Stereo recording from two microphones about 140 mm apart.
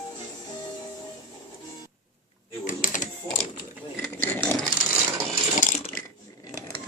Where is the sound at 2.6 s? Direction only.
70° left (ahead or behind).